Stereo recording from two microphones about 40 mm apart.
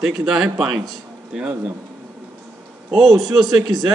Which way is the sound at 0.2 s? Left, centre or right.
Centre.